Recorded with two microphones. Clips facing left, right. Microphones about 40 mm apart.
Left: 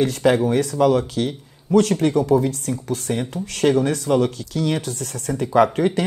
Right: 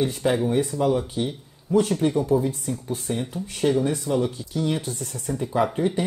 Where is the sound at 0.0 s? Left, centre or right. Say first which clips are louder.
Left 5 dB; left.